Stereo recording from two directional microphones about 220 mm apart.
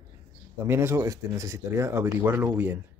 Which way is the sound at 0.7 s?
10° right (ahead or behind).